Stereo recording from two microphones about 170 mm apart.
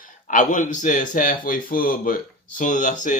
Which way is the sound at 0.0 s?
50° left (ahead or behind).